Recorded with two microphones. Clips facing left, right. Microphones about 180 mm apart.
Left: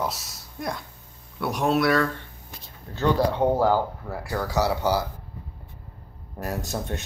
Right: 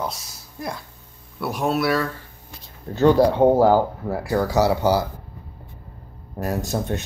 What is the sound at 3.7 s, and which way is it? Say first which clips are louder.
Speech: right 5 dB; 40° right (ahead or behind).